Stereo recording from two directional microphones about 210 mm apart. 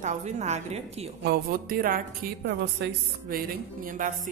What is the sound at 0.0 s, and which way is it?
A woman's voice, 35° right (ahead or behind).